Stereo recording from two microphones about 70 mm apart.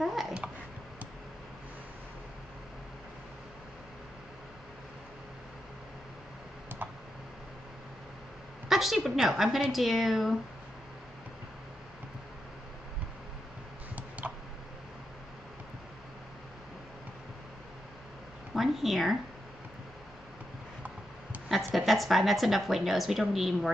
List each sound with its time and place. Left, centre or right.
0.0 s babbling: centre
6.8 s computer keyboard: right
8.6 s a woman's voice: centre
13.9 s a sound: right
18.5 s a sound: centre
21.7 s a woman's voice: centre